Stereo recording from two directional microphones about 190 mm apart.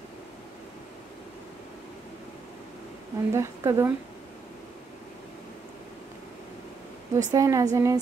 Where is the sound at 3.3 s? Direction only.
15° right (ahead or behind).